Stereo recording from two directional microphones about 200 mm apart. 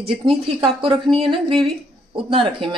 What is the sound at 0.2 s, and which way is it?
Speech, 25° right (ahead or behind).